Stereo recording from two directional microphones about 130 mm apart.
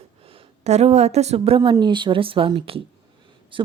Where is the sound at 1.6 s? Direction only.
35° right (ahead or behind).